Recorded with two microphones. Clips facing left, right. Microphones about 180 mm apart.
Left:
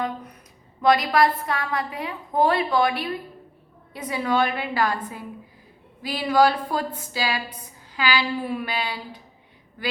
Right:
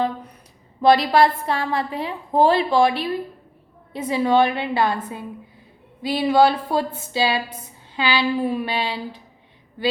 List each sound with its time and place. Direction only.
0.8 s a woman's voice: 30° right (ahead or behind)